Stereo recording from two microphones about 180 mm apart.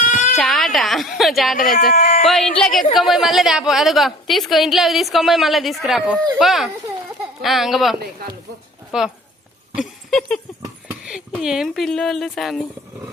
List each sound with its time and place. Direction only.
0.0 s baby cry: 45° left (ahead or behind)
0.3 s a sound: centre (ahead or behind)
1.9 s speech: 45° left (ahead or behind)
2.2 s a woman's voice: centre (ahead or behind)
10.1 s a sound: centre (ahead or behind)
11.0 s speech: 5° right (ahead or behind)